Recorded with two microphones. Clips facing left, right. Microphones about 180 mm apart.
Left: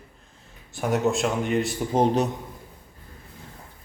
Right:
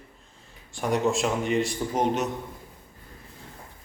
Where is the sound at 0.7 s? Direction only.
5° left (ahead or behind).